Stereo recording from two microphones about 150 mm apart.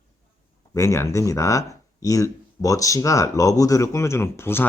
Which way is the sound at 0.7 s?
20° left (ahead or behind).